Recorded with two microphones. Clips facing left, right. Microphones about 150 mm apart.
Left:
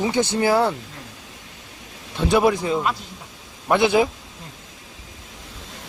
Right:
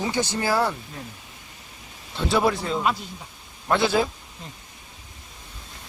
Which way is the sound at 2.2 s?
15° left (ahead or behind).